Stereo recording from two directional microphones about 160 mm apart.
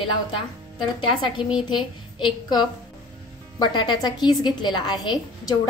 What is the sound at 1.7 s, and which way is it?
Speech, 30° left (ahead or behind).